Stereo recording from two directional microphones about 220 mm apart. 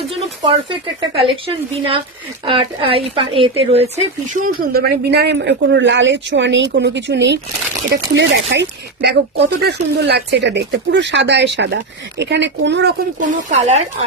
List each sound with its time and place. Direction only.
0.4 s speech: 25° right (ahead or behind)
2.4 s speech: 25° right (ahead or behind); by 12.9 s 50° right (ahead or behind)
13.1 s speech: 35° right (ahead or behind)